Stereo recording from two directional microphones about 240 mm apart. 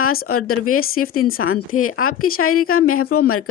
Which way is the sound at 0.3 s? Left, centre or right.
Left.